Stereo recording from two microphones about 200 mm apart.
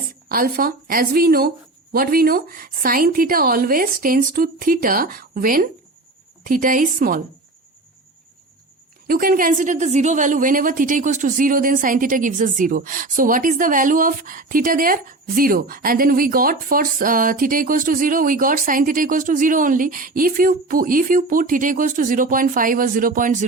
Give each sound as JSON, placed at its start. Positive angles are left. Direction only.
{"t": 0.3, "sound": "a woman's voice", "side_deg": -45}
{"t": 9.0, "sound": "a woman's voice", "side_deg": -45}